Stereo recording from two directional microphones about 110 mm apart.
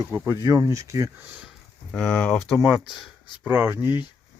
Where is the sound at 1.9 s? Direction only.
10° left (ahead or behind).